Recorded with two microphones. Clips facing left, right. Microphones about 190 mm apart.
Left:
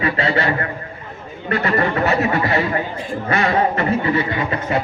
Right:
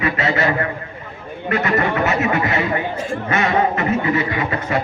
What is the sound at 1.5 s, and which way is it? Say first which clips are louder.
A man's voice: even; 35° left (ahead or behind).